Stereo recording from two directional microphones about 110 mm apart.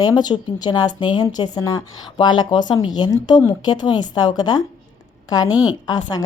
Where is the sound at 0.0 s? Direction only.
35° left (ahead or behind).